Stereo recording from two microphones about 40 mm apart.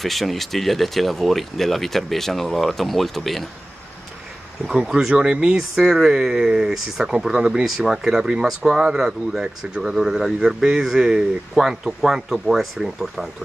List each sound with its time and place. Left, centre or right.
0.0 s speech: centre
4.6 s speech: centre
5.6 s speech: centre